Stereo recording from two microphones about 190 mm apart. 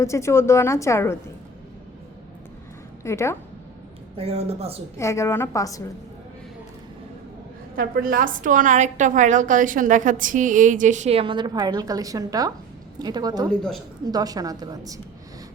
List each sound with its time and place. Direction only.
0.0 s a woman's voice: 15° left (ahead or behind)
3.0 s a woman's voice: 15° left (ahead or behind)
4.2 s a woman's voice: 30° right (ahead or behind)
4.9 s a woman's voice: 15° left (ahead or behind)
7.8 s a woman's voice: 50° right (ahead or behind); by 13.5 s 20° right (ahead or behind)
13.5 s speech: 5° left (ahead or behind)
14.0 s a woman's voice: 20° right (ahead or behind)